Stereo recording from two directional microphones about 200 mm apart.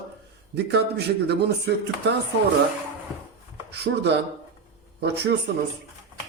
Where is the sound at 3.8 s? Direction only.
55° right (ahead or behind).